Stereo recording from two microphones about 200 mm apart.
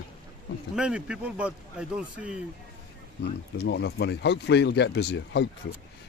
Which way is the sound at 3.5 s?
60° left (ahead or behind).